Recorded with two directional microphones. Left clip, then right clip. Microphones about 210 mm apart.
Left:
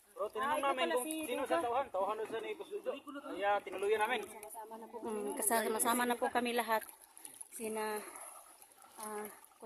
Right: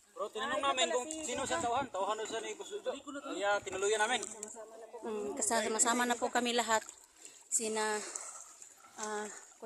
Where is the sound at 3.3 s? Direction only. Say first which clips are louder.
Right 1 dB; 40° right (ahead or behind).